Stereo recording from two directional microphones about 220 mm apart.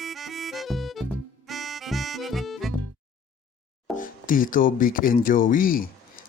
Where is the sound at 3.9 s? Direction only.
40° left (ahead or behind).